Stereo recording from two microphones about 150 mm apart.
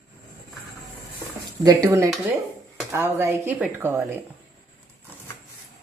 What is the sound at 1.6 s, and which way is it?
Speech, 20° right (ahead or behind).